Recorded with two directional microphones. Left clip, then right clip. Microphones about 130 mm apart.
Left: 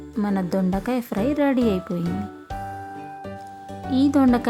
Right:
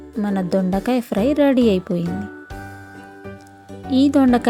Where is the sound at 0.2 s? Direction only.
20° right (ahead or behind).